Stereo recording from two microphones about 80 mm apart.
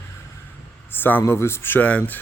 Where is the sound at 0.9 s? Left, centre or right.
Left.